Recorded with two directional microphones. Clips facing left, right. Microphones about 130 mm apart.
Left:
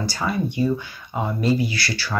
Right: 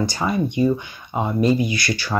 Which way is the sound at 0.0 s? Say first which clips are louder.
Right 3 dB; 20° right (ahead or behind).